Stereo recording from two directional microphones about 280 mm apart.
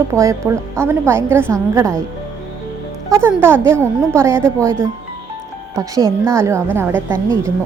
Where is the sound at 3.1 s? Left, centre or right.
Centre.